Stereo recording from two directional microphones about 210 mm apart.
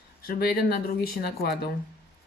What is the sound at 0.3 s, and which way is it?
Speech, 45° left (ahead or behind).